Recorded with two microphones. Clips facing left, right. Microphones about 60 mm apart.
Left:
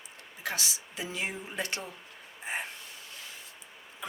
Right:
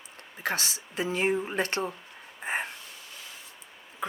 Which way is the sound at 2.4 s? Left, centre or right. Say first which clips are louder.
Right 5 dB; right.